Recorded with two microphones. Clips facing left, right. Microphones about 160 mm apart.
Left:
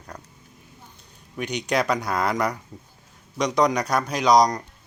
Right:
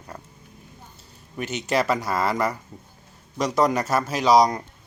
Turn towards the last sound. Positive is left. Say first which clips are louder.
# even
turn(degrees=-5)  # may be behind; listen again after turning